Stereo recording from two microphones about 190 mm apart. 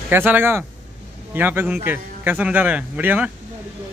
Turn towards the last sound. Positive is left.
turn(degrees=-10)  # may be behind; listen again after turning